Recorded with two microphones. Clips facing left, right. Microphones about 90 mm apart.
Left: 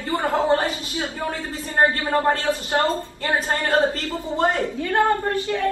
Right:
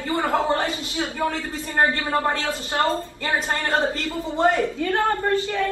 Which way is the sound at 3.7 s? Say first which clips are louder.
Left 3 dB; 25° right (ahead or behind).